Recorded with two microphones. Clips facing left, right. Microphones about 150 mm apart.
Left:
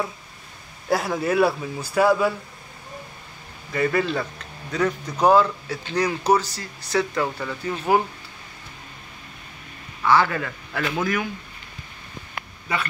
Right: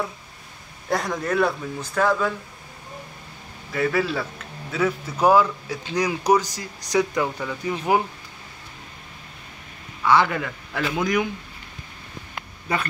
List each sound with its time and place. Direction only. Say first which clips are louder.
0.8 s speech: left 2 dB; 5° left (ahead or behind)
3.7 s a man's voice: left 1 dB; centre (ahead or behind)
10.0 s speech: even; 15° right (ahead or behind)